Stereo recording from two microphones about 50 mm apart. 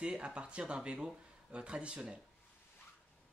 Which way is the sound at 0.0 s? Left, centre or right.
Right.